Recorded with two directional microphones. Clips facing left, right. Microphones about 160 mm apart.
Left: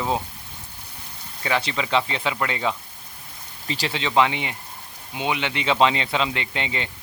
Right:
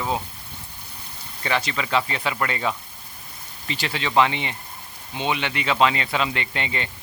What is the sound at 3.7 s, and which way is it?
Speech, 35° left (ahead or behind).